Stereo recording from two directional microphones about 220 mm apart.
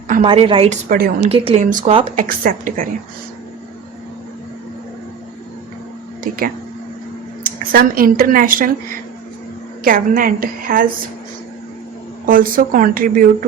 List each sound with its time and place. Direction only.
0.1 s speech: 30° right (ahead or behind)
0.9 s a woman's voice: 40° right (ahead or behind)
1.3 s speech: 30° right (ahead or behind)
2.1 s a woman's voice: 40° right (ahead or behind)
6.3 s a woman's voice: 40° right (ahead or behind)
7.4 s speech: 40° right (ahead or behind)
9.8 s a woman's voice: 40° right (ahead or behind)
12.2 s a woman's voice: 40° right (ahead or behind)